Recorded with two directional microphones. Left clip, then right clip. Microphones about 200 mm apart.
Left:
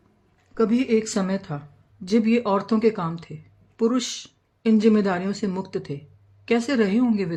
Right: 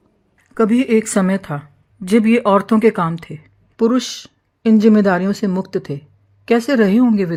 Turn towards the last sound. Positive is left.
turn(degrees=-30)  # may be behind; listen again after turning